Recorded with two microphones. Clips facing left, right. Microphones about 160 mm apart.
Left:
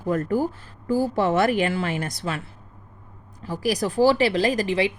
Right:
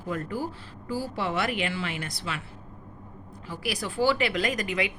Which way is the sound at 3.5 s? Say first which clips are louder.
Left 9 dB; 40° left (ahead or behind).